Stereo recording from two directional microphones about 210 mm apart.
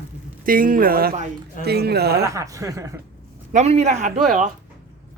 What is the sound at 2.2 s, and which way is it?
Speech, 15° right (ahead or behind).